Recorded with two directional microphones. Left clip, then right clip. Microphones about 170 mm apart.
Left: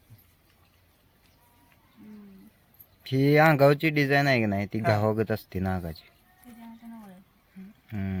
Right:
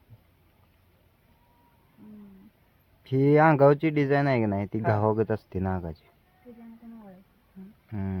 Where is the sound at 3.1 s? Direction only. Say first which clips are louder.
Even; 15° right (ahead or behind).